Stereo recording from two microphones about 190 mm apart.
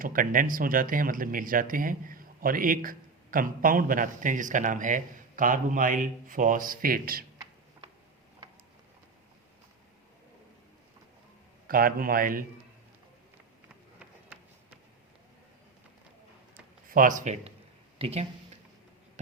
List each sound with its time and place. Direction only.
0.0 s speech: 45° right (ahead or behind)
11.7 s speech: 50° right (ahead or behind)
14.0 s run: 5° right (ahead or behind)
16.9 s speech: 45° right (ahead or behind)